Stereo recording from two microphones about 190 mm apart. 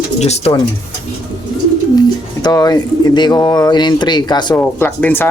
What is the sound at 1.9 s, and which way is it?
Speech, 20° left (ahead or behind).